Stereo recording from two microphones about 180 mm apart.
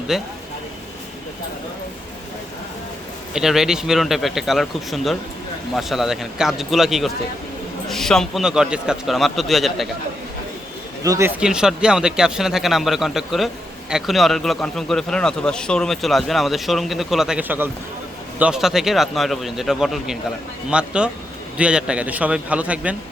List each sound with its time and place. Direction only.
0.1 s speech: centre (ahead or behind)
3.3 s speech: centre (ahead or behind)
11.0 s speech: 20° right (ahead or behind)
11.3 s a man's voice: 5° right (ahead or behind)